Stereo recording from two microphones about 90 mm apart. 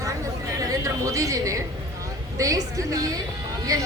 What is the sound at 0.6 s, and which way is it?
A woman's voice, 40° right (ahead or behind).